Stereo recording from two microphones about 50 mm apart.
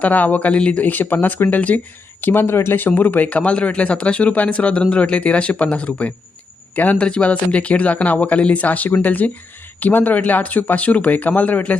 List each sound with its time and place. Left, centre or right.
0.0 s speech: left
0.9 s speech: left
2.3 s speech: left
2.8 s speech: left
3.2 s speech: left